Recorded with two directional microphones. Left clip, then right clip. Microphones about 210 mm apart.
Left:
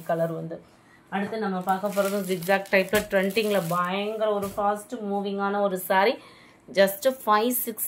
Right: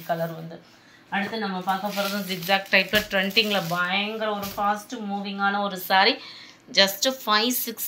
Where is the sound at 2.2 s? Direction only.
50° left (ahead or behind).